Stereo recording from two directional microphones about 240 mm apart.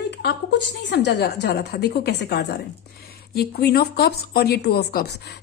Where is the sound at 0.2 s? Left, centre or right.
Left.